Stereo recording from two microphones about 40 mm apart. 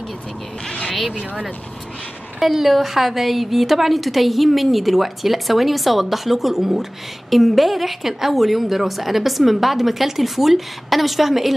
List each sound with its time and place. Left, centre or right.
1.1 s speech: centre
2.4 s a woman's voice: centre